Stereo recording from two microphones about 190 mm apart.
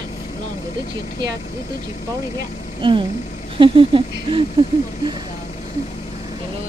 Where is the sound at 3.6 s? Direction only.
25° right (ahead or behind).